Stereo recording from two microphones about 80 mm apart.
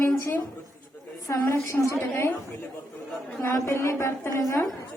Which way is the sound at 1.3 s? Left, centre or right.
Left.